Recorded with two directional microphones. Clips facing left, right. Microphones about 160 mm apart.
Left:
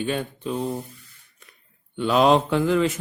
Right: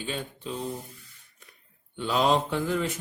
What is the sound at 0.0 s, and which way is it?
Speech, 60° left (ahead or behind).